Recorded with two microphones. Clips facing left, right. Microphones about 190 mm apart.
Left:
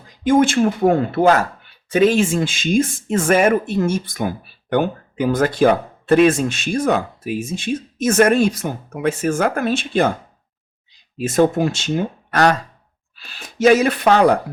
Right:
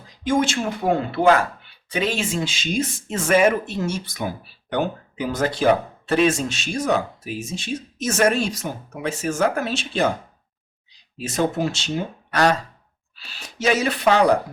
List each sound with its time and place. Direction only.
0.3 s speech: 55° left (ahead or behind)
11.2 s speech: 50° left (ahead or behind)